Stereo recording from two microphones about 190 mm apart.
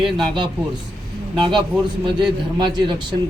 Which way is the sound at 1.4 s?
25° right (ahead or behind).